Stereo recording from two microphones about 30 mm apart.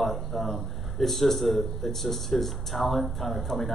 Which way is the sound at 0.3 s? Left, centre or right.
Centre.